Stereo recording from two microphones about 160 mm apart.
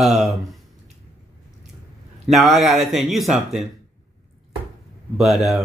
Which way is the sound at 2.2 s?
Centre (ahead or behind).